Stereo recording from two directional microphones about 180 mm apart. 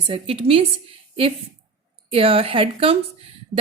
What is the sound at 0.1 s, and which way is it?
Speech, 30° right (ahead or behind).